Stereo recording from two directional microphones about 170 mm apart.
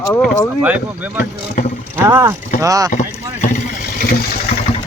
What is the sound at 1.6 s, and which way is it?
Vehicle, 45° left (ahead or behind).